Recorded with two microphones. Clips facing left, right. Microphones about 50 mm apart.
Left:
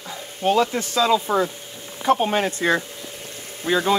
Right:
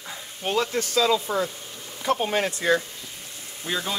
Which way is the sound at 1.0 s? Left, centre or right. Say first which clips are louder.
Left 4 dB; left.